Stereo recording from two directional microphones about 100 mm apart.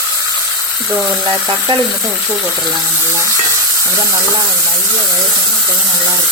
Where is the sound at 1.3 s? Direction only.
50° right (ahead or behind).